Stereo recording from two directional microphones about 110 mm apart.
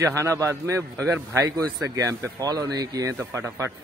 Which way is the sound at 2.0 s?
35° right (ahead or behind).